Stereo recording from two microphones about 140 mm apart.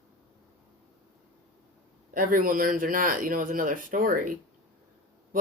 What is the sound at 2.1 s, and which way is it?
Speech, 75° right (ahead or behind).